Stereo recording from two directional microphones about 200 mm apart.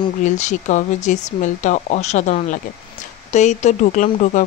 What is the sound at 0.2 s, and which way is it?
Speech, 35° left (ahead or behind).